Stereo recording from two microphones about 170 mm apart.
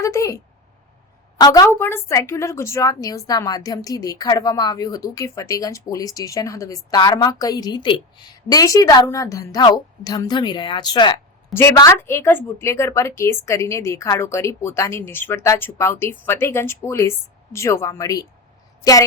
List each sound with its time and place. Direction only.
0.0 s a woman's voice: 20° left (ahead or behind)
1.4 s a woman's voice: 20° left (ahead or behind)
11.5 s a woman's voice: 15° left (ahead or behind)